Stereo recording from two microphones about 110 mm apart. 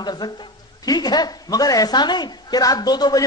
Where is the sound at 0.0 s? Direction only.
40° left (ahead or behind).